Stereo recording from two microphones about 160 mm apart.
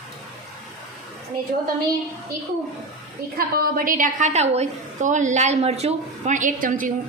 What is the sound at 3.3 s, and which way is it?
A woman's voice, 65° right (ahead or behind).